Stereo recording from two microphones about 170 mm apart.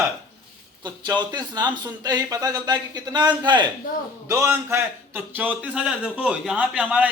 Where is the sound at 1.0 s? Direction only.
25° right (ahead or behind).